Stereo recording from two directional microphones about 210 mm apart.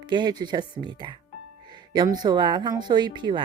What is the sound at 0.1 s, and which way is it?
Speech, 20° right (ahead or behind).